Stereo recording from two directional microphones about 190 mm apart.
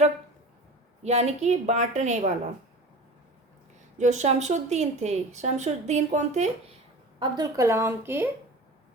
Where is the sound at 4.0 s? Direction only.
40° right (ahead or behind).